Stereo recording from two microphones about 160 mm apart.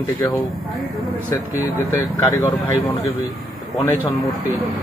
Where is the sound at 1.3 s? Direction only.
15° left (ahead or behind).